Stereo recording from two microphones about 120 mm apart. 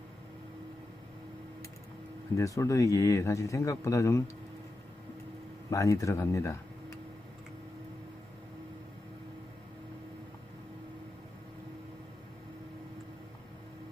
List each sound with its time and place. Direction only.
2.3 s speech: 25° left (ahead or behind)
5.7 s speech: 25° left (ahead or behind)